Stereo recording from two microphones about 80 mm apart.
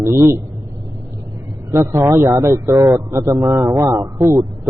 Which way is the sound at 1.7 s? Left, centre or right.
Right.